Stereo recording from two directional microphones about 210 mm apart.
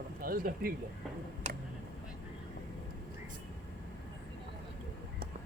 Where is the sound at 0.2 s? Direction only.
45° right (ahead or behind).